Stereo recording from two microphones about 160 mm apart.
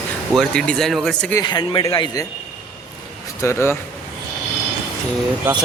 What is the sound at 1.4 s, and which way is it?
Speech, 30° left (ahead or behind).